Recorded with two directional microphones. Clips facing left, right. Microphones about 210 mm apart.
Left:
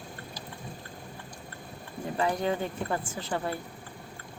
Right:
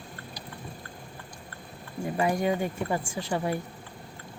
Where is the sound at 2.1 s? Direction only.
10° right (ahead or behind).